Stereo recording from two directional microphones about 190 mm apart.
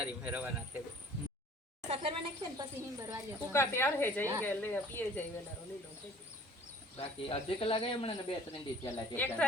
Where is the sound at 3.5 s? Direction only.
10° left (ahead or behind).